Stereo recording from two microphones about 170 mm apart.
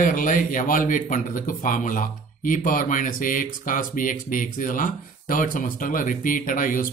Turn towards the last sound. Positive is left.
turn(degrees=55)  # may be behind; listen again after turning